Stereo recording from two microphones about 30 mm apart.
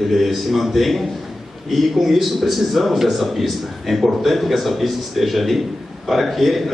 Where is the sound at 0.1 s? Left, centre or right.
Centre.